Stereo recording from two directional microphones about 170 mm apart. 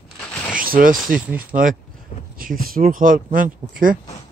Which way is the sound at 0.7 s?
55° right (ahead or behind).